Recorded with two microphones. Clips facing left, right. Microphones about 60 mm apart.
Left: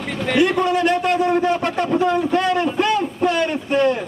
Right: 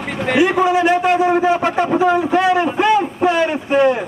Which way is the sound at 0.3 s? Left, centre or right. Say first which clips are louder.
Right 3 dB; centre.